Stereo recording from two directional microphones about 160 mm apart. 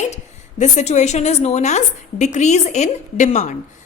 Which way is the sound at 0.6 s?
45° left (ahead or behind).